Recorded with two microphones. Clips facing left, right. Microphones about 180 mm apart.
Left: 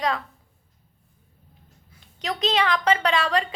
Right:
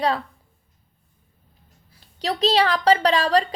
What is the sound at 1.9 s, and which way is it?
A woman's voice, 35° right (ahead or behind).